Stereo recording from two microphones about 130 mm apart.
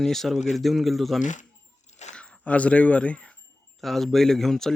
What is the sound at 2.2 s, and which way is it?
Speech, 10° left (ahead or behind).